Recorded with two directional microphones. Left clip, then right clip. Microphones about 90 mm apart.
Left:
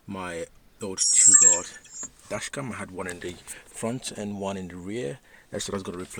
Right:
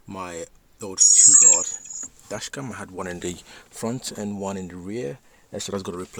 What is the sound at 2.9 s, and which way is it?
Speech, 35° right (ahead or behind).